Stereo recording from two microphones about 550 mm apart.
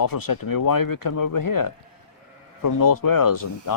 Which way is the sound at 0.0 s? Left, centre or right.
Left.